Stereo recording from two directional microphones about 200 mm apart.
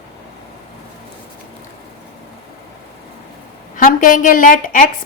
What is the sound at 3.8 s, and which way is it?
A woman's voice, 45° left (ahead or behind).